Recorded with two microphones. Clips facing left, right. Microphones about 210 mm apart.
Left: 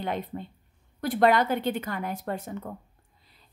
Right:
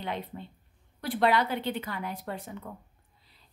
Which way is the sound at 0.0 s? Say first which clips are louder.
Left 4 dB; 45° left (ahead or behind).